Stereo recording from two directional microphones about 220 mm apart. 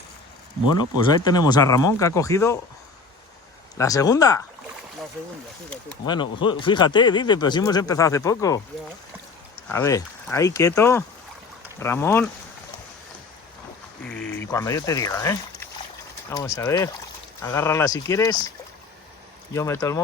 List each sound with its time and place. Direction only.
0.7 s speech: 20° left (ahead or behind)
3.8 s speech: 15° left (ahead or behind)
6.1 s speech: 20° left (ahead or behind)
9.6 s speech: 10° left (ahead or behind)
14.1 s speech: 5° left (ahead or behind)
19.5 s speech: 15° left (ahead or behind)